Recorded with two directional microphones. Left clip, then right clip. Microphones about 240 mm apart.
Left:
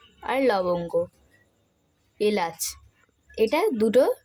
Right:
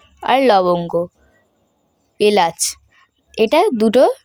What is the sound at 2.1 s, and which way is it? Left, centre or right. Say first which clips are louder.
Speech: right 11 dB; right.